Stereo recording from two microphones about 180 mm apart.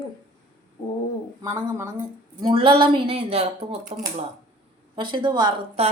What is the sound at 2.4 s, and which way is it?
A woman's voice, 30° right (ahead or behind).